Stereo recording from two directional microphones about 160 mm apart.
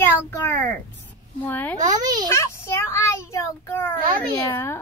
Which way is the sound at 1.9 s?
25° right (ahead or behind).